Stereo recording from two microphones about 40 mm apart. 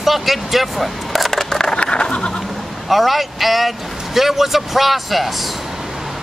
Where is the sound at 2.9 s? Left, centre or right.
Centre.